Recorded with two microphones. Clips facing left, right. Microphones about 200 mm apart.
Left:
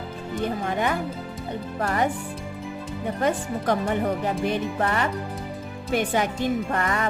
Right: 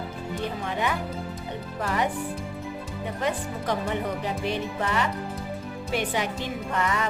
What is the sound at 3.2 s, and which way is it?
Speech, 50° left (ahead or behind).